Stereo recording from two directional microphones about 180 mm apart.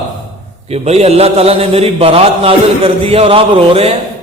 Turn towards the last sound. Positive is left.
turn(degrees=-35)  # may be behind; listen again after turning